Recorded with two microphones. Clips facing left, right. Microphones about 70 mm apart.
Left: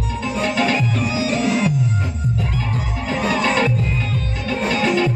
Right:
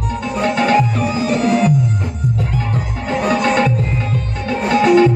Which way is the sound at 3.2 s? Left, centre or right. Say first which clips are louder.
Right 3 dB; right.